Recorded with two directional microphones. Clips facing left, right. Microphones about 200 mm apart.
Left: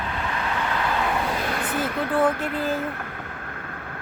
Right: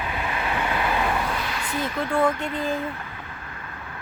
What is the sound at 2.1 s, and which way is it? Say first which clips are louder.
Speech: left 1 dB; 5° left (ahead or behind).